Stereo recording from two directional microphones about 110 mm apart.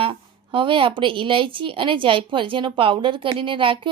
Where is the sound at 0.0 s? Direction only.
50° right (ahead or behind).